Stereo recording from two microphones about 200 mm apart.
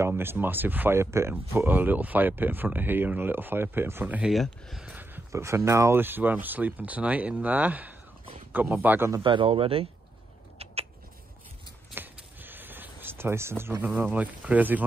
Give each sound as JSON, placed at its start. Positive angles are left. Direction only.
{"t": 0.0, "sound": "speech", "side_deg": -10}
{"t": 9.2, "sound": "speech", "side_deg": -25}
{"t": 10.6, "sound": "rodents", "side_deg": -30}
{"t": 11.9, "sound": "a sound", "side_deg": -10}